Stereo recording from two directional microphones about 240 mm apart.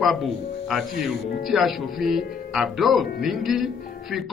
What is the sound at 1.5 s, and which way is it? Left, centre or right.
Speech, centre.